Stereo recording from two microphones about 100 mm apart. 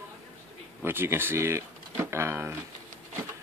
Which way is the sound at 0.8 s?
20° right (ahead or behind).